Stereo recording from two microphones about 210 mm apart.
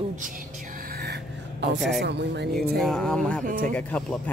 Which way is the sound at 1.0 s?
50° right (ahead or behind).